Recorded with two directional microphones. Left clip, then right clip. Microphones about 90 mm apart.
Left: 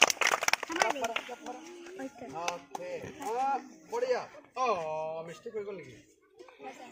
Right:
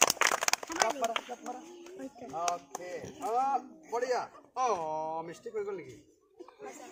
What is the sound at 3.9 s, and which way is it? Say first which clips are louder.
Speech: left 1 dB; 35° right (ahead or behind).